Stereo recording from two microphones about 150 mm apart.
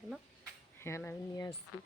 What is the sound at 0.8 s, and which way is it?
Speech, 15° left (ahead or behind).